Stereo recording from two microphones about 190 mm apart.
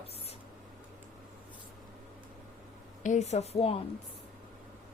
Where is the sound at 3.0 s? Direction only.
35° left (ahead or behind).